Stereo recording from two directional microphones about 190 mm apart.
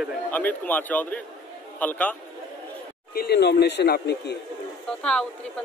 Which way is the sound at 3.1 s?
60° left (ahead or behind).